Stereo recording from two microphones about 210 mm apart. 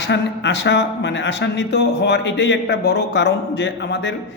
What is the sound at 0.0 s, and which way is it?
Speech, 55° left (ahead or behind).